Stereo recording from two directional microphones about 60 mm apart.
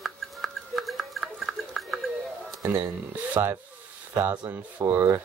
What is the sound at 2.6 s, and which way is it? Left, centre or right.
Speech, right.